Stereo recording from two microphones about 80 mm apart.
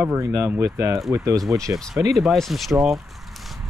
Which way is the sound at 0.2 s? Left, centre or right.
Right.